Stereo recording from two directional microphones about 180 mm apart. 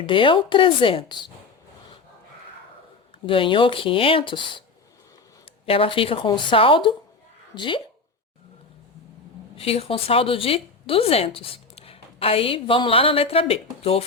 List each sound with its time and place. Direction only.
0.0 s speech: 30° left (ahead or behind)
3.2 s speech: 30° left (ahead or behind)
5.6 s speech: 30° left (ahead or behind)
9.6 s speech: 35° left (ahead or behind)